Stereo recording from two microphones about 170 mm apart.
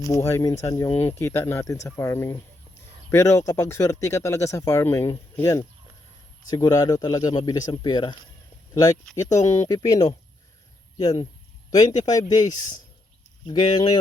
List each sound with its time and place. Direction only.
0.3 s speech: 15° left (ahead or behind)